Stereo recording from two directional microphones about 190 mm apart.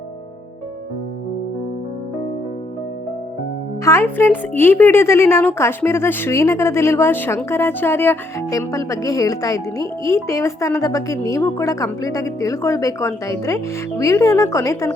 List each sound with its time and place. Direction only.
3.8 s speech: 15° left (ahead or behind)